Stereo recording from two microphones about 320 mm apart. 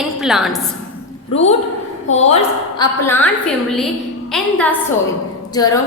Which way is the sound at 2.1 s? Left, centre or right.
Centre.